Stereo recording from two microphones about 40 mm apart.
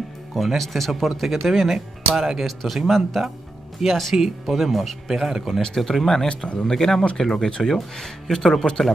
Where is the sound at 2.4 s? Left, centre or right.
Centre.